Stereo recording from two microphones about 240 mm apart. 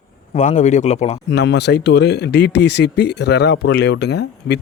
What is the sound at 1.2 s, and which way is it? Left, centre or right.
Speech, left.